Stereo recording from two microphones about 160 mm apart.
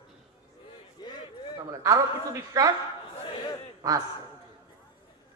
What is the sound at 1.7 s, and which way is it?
A man's voice, 20° right (ahead or behind).